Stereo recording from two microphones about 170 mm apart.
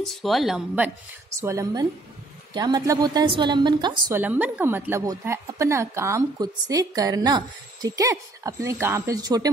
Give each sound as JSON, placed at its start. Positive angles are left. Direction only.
{"t": 0.2, "sound": "a woman's voice", "side_deg": 0}
{"t": 1.4, "sound": "a woman's voice", "side_deg": -15}
{"t": 4.1, "sound": "a woman's voice", "side_deg": -10}